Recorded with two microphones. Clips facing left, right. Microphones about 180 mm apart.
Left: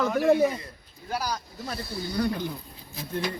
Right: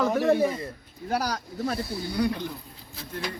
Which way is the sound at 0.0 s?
Centre (ahead or behind).